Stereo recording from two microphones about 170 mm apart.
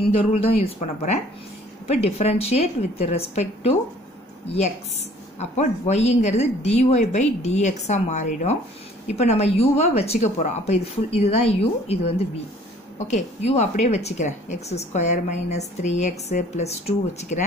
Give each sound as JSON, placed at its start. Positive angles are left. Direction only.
{"t": 0.1, "sound": "speech", "side_deg": 35}
{"t": 13.1, "sound": "speech", "side_deg": 40}